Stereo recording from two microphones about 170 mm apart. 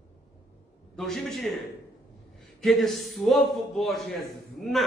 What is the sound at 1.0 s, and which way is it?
A man's voice, centre (ahead or behind).